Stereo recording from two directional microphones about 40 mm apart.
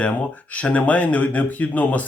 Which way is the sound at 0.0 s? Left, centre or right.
Left.